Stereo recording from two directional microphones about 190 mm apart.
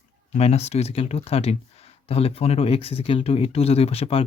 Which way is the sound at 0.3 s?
35° left (ahead or behind).